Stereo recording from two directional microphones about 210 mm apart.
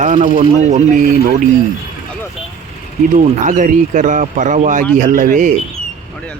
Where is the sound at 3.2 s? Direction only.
35° right (ahead or behind).